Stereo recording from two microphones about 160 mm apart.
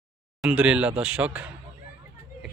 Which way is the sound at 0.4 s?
5° right (ahead or behind).